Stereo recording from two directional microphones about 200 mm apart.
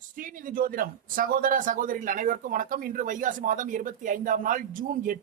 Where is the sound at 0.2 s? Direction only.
45° right (ahead or behind).